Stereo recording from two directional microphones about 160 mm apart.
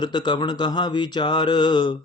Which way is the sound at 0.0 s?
30° left (ahead or behind).